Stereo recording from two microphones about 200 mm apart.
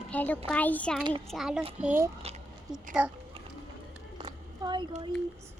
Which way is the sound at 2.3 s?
30° right (ahead or behind).